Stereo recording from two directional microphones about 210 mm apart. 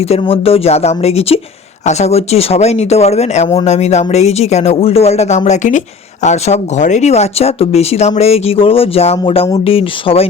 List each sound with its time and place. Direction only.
0.0 s speech: 30° left (ahead or behind)